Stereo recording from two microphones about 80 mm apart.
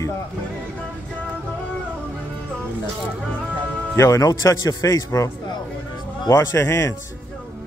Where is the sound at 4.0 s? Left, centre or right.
Left.